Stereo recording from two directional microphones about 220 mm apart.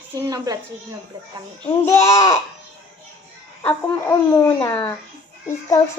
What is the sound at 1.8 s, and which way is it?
Speech, 15° left (ahead or behind).